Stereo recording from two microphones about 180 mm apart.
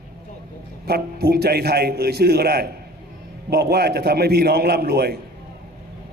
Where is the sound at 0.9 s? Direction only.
60° right (ahead or behind).